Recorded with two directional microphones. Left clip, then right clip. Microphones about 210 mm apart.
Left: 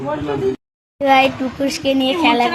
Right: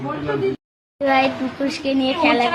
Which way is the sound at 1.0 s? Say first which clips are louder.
Left 4 dB; 15° left (ahead or behind).